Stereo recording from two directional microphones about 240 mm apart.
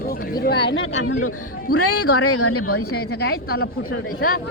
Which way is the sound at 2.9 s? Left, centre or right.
Left.